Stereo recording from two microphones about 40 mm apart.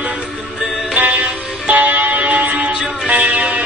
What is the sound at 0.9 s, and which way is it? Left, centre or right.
Music, right.